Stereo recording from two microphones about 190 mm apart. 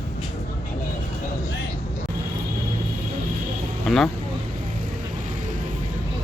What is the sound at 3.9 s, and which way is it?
Vehicle, centre (ahead or behind).